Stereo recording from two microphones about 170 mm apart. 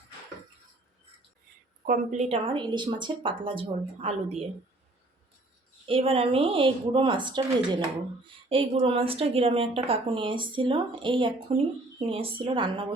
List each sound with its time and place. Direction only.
1.9 s a woman's voice: 45° right (ahead or behind)
5.8 s a woman's voice: 35° right (ahead or behind)